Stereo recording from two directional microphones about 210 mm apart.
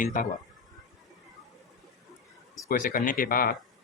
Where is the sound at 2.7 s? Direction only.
40° left (ahead or behind).